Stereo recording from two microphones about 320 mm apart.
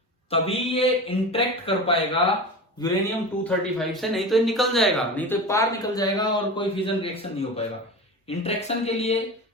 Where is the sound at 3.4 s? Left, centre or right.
Centre.